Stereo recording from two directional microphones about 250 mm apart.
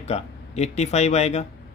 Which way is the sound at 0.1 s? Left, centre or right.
Left.